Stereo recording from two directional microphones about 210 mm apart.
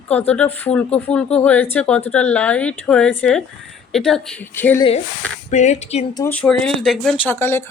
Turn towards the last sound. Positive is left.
turn(degrees=10)  # may be behind; listen again after turning